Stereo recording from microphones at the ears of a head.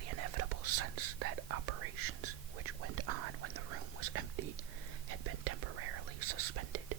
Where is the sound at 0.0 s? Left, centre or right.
Right.